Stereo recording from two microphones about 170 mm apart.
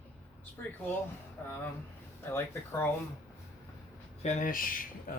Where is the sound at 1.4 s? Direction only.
10° left (ahead or behind).